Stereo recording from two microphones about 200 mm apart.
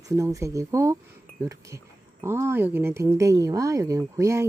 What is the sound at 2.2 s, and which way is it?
Speech, 15° right (ahead or behind).